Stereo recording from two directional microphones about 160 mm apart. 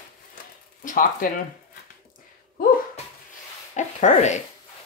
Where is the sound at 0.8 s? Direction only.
60° left (ahead or behind).